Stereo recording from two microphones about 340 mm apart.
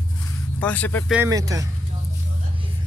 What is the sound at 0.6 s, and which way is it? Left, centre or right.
Speech, centre.